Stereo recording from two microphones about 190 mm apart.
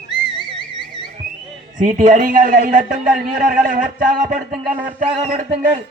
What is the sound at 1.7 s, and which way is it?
A man's voice, 45° right (ahead or behind).